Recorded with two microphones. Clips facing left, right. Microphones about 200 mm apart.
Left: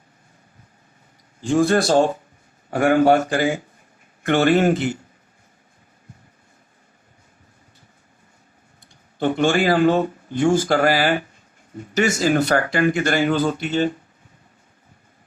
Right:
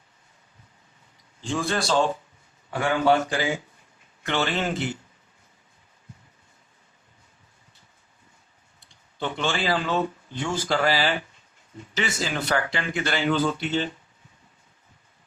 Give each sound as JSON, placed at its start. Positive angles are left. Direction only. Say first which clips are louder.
{"t": 1.4, "sound": "speech", "louder": "left 10 dB", "side_deg": 45}
{"t": 9.1, "sound": "speech", "louder": "left 9 dB", "side_deg": 45}